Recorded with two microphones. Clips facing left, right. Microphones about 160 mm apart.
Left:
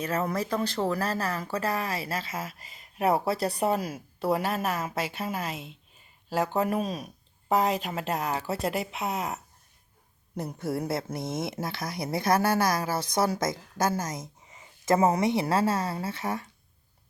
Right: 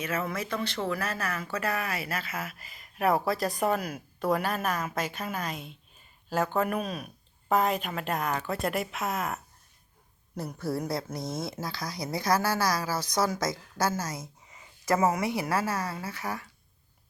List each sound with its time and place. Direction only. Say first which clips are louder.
0.0 s a woman's voice: left 3 dB; 40° left (ahead or behind)
6.8 s a woman's voice: left 2 dB; 40° left (ahead or behind)
12.5 s speech: left 3 dB; 55° left (ahead or behind)
12.7 s a woman's voice: left 2 dB; 25° left (ahead or behind)